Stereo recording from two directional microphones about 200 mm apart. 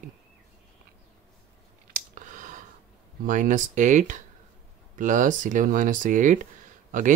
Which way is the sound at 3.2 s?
40° right (ahead or behind).